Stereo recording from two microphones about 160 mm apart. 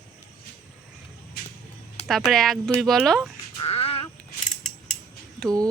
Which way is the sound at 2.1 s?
Centre (ahead or behind).